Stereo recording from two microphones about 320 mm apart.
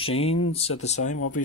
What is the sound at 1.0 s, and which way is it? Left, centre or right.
Speech, left.